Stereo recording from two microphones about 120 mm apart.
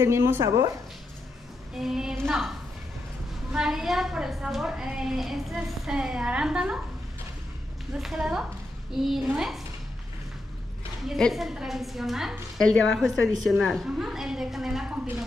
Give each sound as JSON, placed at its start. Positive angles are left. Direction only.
{"t": 0.0, "sound": "speech", "side_deg": -20}
{"t": 1.8, "sound": "a woman's voice", "side_deg": -5}
{"t": 3.5, "sound": "a woman's voice", "side_deg": -5}
{"t": 7.9, "sound": "a woman's voice", "side_deg": -5}
{"t": 11.1, "sound": "a woman's voice", "side_deg": 0}